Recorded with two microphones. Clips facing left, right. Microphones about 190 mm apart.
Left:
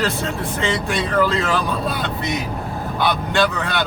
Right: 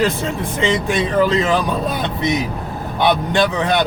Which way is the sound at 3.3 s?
15° right (ahead or behind).